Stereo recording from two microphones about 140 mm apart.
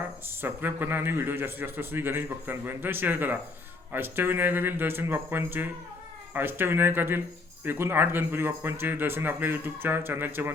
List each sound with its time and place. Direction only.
0.4 s speech: 15° right (ahead or behind)